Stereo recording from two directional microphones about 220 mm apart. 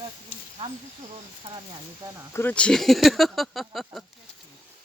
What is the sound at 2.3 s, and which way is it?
Speech, 10° left (ahead or behind).